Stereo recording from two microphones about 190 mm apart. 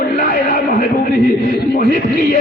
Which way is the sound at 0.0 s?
50° left (ahead or behind).